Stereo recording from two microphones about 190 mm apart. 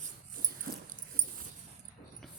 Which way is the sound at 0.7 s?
55° right (ahead or behind).